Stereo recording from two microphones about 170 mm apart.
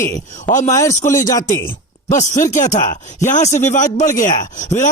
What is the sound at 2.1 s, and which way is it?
A man's voice, 45° left (ahead or behind).